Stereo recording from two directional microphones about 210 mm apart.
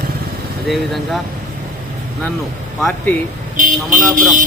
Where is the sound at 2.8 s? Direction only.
Centre (ahead or behind).